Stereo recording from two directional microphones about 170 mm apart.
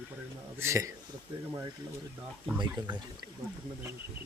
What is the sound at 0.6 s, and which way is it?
Speech, 15° right (ahead or behind).